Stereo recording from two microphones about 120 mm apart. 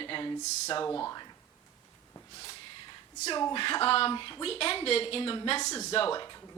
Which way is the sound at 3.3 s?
40° left (ahead or behind).